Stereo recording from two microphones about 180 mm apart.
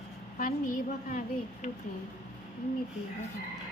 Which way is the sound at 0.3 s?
50° left (ahead or behind).